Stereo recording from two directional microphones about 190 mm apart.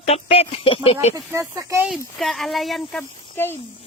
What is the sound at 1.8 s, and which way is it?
Speech, centre (ahead or behind).